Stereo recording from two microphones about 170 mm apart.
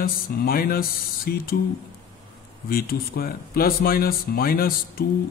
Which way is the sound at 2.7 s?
60° left (ahead or behind).